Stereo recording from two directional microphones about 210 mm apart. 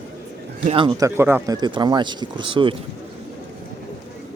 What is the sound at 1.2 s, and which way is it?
Speech, 10° right (ahead or behind).